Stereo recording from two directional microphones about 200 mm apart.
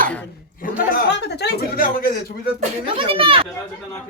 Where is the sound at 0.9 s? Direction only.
55° left (ahead or behind).